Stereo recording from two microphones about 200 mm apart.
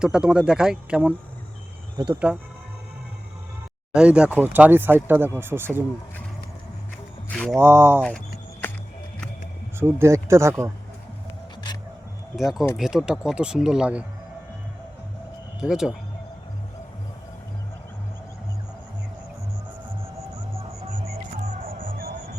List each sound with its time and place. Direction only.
0.0 s speech: 5° right (ahead or behind)
2.3 s speech: 5° right (ahead or behind)
3.9 s speech: 5° right (ahead or behind)
7.3 s a sound: 5° left (ahead or behind)
7.5 s speech: 15° right (ahead or behind)
9.7 s speech: 10° right (ahead or behind)
12.4 s speech: centre (ahead or behind)
15.6 s speech: centre (ahead or behind)
21.8 s music: 45° right (ahead or behind)